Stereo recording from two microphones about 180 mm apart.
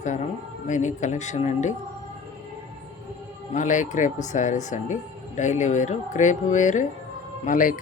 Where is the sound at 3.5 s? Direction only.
45° left (ahead or behind).